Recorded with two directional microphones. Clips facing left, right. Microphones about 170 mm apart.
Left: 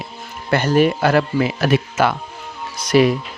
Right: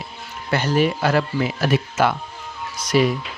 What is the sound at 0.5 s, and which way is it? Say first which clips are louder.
Speech: left 4 dB; 50° left (ahead or behind).